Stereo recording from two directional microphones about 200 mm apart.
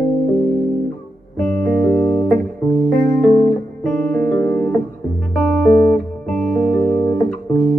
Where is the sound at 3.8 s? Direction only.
5° left (ahead or behind).